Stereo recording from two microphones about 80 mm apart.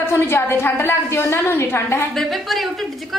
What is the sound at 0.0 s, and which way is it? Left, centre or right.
A woman's voice, left.